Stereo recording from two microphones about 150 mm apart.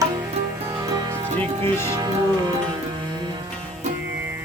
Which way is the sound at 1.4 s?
15° left (ahead or behind).